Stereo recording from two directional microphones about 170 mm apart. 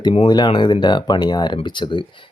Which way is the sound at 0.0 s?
30° left (ahead or behind).